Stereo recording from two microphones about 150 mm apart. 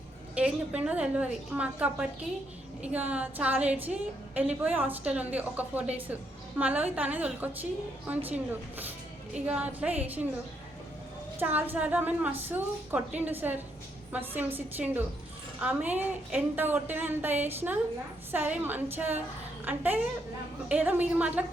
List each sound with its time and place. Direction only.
0.3 s a woman's voice: 10° right (ahead or behind)
9.5 s a woman's voice: 10° right (ahead or behind)
11.3 s a woman's voice: 15° right (ahead or behind)